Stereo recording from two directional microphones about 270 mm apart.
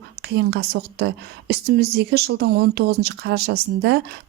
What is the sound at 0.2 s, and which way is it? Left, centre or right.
A woman's voice, right.